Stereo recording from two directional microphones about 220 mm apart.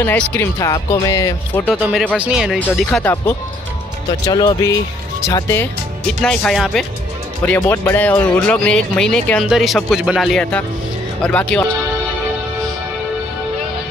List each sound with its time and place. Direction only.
0.0 s speech: 10° left (ahead or behind)
1.7 s speech: centre (ahead or behind)
4.3 s speech: 20° left (ahead or behind)